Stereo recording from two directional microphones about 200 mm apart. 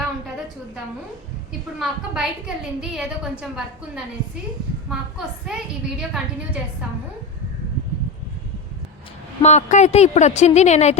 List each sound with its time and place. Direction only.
1.8 s a woman's voice: 5° right (ahead or behind)
9.4 s a woman's voice: 35° left (ahead or behind)